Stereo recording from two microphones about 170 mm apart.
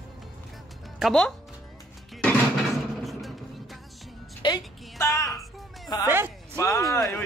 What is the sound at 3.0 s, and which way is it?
Music, centre (ahead or behind).